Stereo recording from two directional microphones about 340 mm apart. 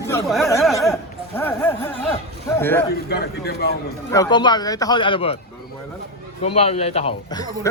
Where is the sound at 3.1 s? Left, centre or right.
Left.